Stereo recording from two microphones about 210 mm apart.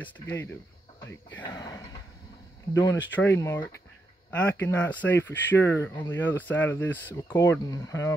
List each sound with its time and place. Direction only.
0.0 s speech: 10° left (ahead or behind)